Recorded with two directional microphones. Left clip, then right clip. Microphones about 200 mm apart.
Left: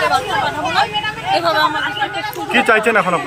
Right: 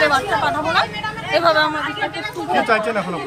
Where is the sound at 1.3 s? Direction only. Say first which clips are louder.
Even; 5° right (ahead or behind).